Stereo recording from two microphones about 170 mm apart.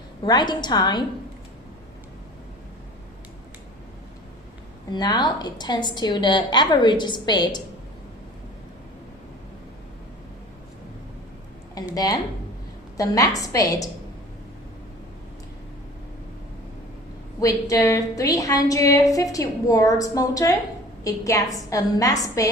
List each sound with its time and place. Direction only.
0.3 s a woman's voice: 25° left (ahead or behind)
4.9 s a woman's voice: 25° left (ahead or behind)
13.0 s a woman's voice: 20° left (ahead or behind)
17.4 s a woman's voice: 20° left (ahead or behind)